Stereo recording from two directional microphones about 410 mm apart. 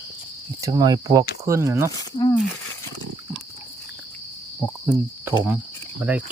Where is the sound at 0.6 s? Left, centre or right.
Centre.